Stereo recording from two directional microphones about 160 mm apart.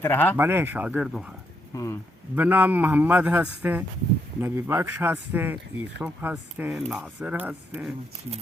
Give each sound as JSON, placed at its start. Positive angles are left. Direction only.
{"t": 0.0, "sound": "speech", "side_deg": 10}
{"t": 0.3, "sound": "speech", "side_deg": -15}
{"t": 1.7, "sound": "speech", "side_deg": 20}
{"t": 2.3, "sound": "speech", "side_deg": -10}